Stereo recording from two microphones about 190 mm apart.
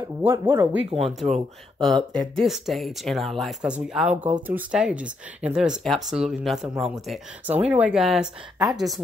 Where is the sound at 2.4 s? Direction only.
Centre (ahead or behind).